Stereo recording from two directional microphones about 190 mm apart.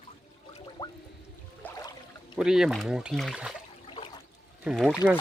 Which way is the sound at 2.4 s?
5° right (ahead or behind).